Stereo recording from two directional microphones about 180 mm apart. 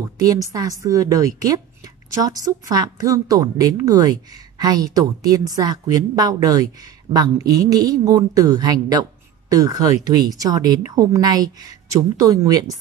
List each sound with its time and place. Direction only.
0.0 s a woman's voice: 20° right (ahead or behind)